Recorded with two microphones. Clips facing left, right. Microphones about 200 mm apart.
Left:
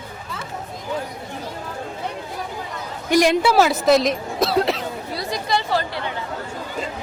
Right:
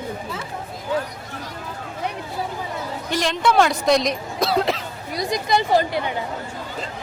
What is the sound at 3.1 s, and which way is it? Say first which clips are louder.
Speech: left 5 dB; 10° left (ahead or behind).